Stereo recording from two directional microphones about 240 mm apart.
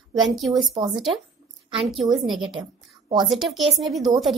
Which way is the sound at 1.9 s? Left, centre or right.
Centre.